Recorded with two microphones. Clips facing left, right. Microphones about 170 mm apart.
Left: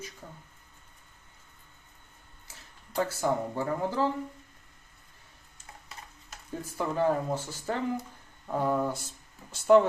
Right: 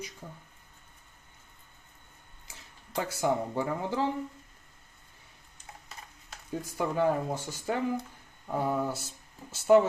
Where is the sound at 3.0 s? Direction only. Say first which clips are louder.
Left 1 dB; 15° right (ahead or behind).